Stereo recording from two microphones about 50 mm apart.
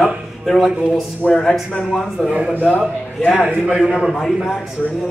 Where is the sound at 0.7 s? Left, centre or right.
Centre.